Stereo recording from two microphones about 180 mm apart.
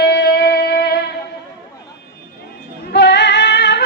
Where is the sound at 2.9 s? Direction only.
70° left (ahead or behind).